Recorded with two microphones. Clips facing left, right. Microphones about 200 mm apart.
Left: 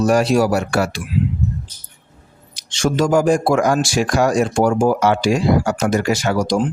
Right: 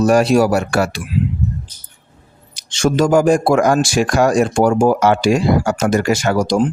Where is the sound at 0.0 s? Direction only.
55° right (ahead or behind).